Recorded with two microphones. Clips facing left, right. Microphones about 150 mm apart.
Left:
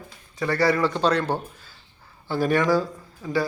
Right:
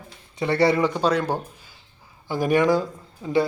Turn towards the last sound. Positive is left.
turn(degrees=-20)  # may be behind; listen again after turning